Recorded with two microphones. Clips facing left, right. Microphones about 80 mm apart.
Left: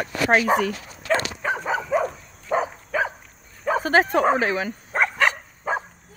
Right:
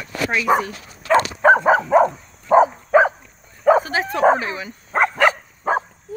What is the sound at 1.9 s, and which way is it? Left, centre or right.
Dog, right.